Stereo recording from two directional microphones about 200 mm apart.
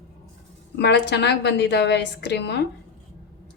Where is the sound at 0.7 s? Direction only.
60° left (ahead or behind).